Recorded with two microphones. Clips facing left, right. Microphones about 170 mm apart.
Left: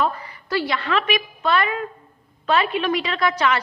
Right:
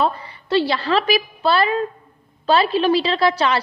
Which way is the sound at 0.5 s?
30° right (ahead or behind).